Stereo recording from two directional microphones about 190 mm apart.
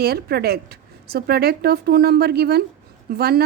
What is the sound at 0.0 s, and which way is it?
Speech, 55° right (ahead or behind).